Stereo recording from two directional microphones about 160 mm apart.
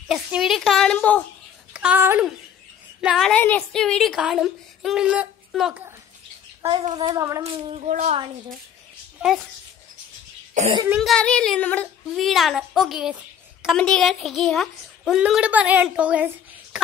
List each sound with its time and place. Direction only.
0.1 s speech: centre (ahead or behind)
1.7 s a sound: 10° right (ahead or behind)
3.0 s a woman's voice: 5° right (ahead or behind)
3.3 s speech: 10° left (ahead or behind)
6.7 s a woman's voice: 30° right (ahead or behind)
7.4 s speech: 40° right (ahead or behind)
9.2 s speech: centre (ahead or behind)
10.6 s a child's voice: 50° right (ahead or behind)
11.0 s speech: 5° left (ahead or behind)
16.7 s a sound: 5° right (ahead or behind)